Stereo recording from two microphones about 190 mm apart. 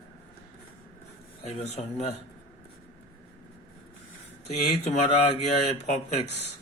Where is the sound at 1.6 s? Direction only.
35° left (ahead or behind).